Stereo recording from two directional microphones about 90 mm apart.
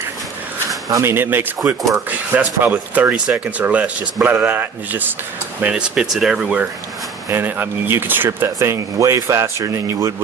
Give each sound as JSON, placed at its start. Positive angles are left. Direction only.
{"t": 0.9, "sound": "speech", "side_deg": -40}
{"t": 1.1, "sound": "speech", "side_deg": -25}
{"t": 5.7, "sound": "speech", "side_deg": -5}
{"t": 7.3, "sound": "speech", "side_deg": -25}